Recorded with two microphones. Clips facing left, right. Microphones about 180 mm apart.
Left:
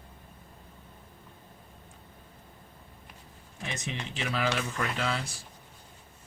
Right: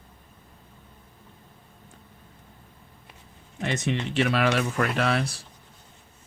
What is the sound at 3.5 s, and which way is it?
Speech, 70° right (ahead or behind).